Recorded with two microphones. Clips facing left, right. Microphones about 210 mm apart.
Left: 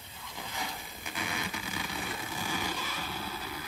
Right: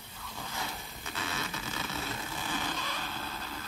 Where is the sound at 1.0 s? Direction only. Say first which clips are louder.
Left 1 dB; 15° left (ahead or behind).